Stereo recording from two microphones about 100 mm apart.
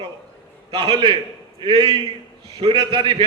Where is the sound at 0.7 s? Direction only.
45° right (ahead or behind).